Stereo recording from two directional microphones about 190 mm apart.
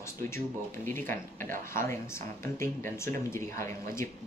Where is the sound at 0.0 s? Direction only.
15° left (ahead or behind).